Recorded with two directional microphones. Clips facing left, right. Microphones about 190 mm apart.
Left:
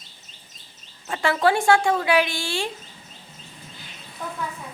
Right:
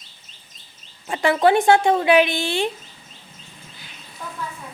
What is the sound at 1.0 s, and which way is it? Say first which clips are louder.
A woman's voice: right 4 dB; 15° right (ahead or behind).